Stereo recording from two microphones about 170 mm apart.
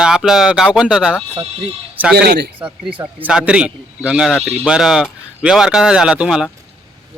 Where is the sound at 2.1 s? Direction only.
70° right (ahead or behind).